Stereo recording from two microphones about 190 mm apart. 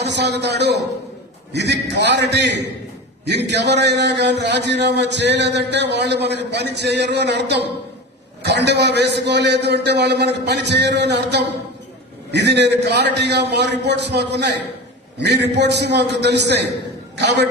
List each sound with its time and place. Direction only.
0.0 s a man's voice: 65° right (ahead or behind)